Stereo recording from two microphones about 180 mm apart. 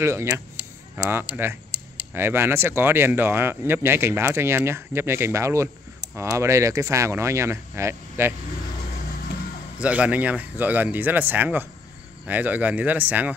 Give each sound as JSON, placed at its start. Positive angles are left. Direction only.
{"t": 0.0, "sound": "speech", "side_deg": -15}
{"t": 9.8, "sound": "speech", "side_deg": -5}